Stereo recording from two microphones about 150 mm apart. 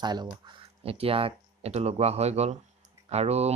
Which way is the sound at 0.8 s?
40° right (ahead or behind).